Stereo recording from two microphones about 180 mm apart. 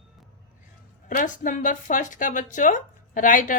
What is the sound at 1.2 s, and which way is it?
Speech, 45° left (ahead or behind).